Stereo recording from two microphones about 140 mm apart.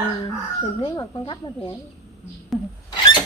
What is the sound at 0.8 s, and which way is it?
Speech, 30° left (ahead or behind).